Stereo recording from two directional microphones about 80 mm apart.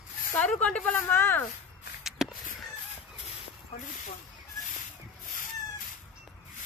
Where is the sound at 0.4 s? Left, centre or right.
Centre.